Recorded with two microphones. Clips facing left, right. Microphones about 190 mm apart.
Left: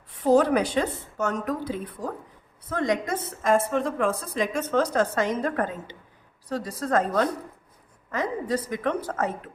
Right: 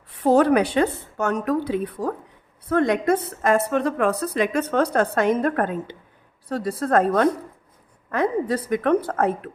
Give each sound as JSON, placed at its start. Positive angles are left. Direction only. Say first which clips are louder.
{"t": 0.2, "sound": "a woman's voice", "louder": "right 3 dB", "side_deg": -65}